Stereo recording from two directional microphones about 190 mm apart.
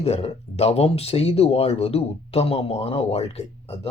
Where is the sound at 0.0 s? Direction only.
35° left (ahead or behind).